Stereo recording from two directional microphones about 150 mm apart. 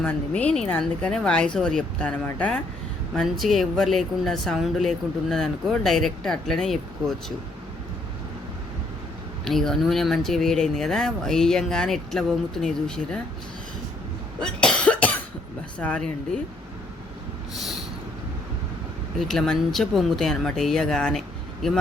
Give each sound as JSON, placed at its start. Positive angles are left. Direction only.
{"t": 0.0, "sound": "a woman's voice", "side_deg": 10}
{"t": 9.4, "sound": "speech", "side_deg": 0}
{"t": 14.3, "sound": "cough", "side_deg": 5}
{"t": 15.8, "sound": "a woman's voice", "side_deg": 10}
{"t": 19.3, "sound": "speech", "side_deg": 5}